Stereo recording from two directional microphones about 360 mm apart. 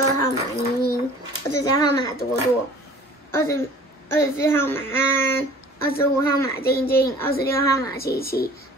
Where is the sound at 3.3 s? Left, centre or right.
Centre.